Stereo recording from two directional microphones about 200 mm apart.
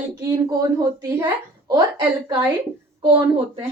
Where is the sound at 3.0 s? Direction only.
25° right (ahead or behind).